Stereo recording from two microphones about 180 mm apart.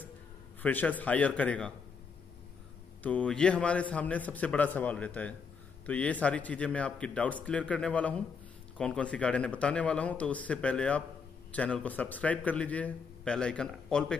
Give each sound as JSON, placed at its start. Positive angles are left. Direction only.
{"t": 0.6, "sound": "a man's voice", "side_deg": 10}
{"t": 3.0, "sound": "a man's voice", "side_deg": 5}